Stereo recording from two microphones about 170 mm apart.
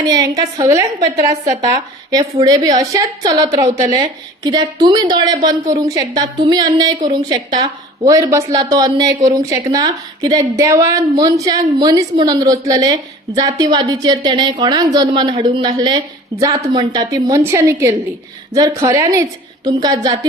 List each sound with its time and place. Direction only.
0.0 s a woman's voice: 20° right (ahead or behind)